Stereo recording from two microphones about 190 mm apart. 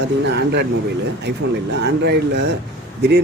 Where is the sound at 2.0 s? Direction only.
60° right (ahead or behind).